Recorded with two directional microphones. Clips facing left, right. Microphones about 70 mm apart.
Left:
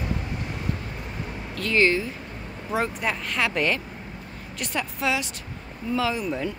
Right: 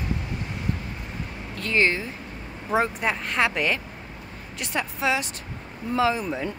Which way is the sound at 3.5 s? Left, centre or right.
Centre.